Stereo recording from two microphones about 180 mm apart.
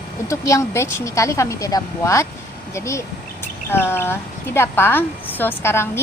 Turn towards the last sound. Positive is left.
turn(degrees=15)  # may be behind; listen again after turning